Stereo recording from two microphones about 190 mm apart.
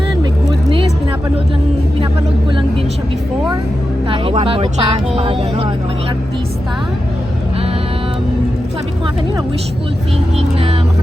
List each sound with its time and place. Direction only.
4.1 s speech: 30° right (ahead or behind)
10.3 s speech: 30° right (ahead or behind)